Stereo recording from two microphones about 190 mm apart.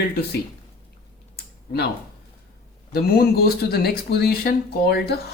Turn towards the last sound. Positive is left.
turn(degrees=55)  # may be behind; listen again after turning